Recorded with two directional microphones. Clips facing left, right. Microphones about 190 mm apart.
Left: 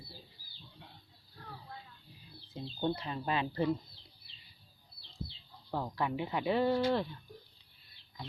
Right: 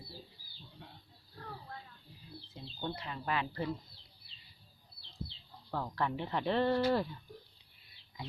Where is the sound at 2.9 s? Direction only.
25° left (ahead or behind).